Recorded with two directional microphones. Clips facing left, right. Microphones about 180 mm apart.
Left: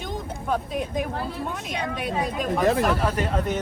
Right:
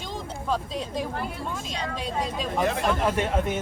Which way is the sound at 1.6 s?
55° left (ahead or behind).